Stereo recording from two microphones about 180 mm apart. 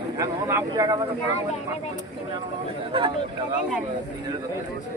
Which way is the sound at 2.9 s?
30° right (ahead or behind).